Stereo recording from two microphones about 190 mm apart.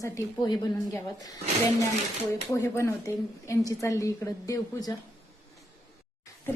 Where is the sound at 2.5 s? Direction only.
15° left (ahead or behind).